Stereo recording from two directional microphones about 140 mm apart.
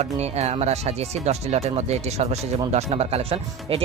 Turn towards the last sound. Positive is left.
turn(degrees=-40)  # may be behind; listen again after turning